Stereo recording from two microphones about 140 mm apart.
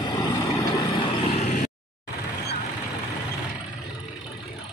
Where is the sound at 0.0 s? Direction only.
30° left (ahead or behind).